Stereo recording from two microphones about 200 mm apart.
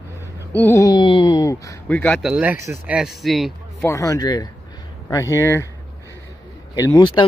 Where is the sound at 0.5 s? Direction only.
10° left (ahead or behind).